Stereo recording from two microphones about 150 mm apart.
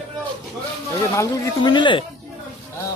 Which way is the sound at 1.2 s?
30° left (ahead or behind).